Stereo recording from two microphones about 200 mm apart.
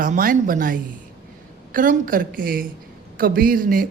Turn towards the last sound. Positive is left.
turn(degrees=-45)  # may be behind; listen again after turning